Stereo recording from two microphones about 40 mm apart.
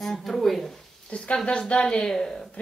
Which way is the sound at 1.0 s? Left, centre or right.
Left.